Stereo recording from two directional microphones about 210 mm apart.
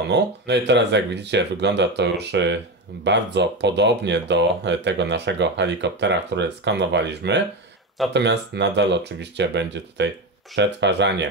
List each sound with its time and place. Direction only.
0.1 s speech: 55° right (ahead or behind)